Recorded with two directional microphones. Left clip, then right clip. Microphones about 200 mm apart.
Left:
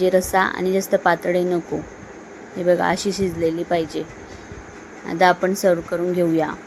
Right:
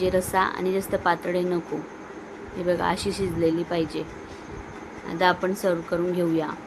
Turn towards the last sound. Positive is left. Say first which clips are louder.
# left 5 dB
turn(degrees=20)  # may be behind; listen again after turning